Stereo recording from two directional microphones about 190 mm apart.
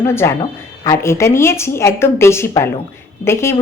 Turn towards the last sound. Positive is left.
turn(degrees=15)  # may be behind; listen again after turning